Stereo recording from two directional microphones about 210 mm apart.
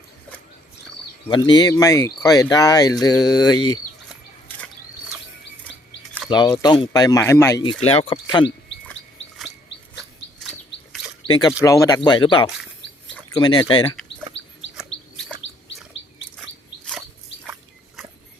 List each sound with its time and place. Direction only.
1.3 s speech: 20° left (ahead or behind)
6.3 s speech: 20° left (ahead or behind)
7.6 s speech: 25° left (ahead or behind)
11.3 s speech: 20° left (ahead or behind)
13.8 s chicken: 5° left (ahead or behind)